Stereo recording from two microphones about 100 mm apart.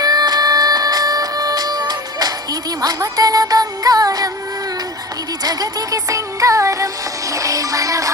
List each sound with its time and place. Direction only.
0.0 s music: 40° right (ahead or behind)
5.4 s music: 40° right (ahead or behind)